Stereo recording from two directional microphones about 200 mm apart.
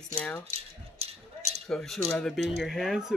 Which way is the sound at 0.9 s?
30° right (ahead or behind).